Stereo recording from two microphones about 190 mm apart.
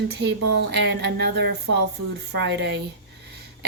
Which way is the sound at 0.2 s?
60° right (ahead or behind).